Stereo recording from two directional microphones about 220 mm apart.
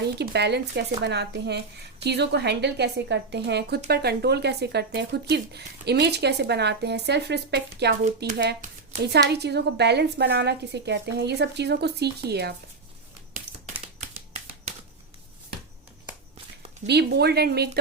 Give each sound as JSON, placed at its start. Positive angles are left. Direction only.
{"t": 0.2, "sound": "speech", "side_deg": -50}
{"t": 16.8, "sound": "speech", "side_deg": -50}